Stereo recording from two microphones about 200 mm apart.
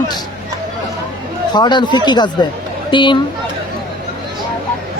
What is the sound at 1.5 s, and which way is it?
A man's voice, 20° left (ahead or behind).